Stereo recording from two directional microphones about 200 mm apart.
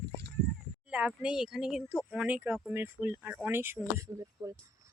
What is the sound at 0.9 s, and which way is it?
Speech, 5° right (ahead or behind).